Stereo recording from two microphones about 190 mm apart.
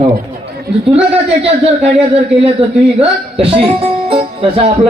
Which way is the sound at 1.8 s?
30° right (ahead or behind).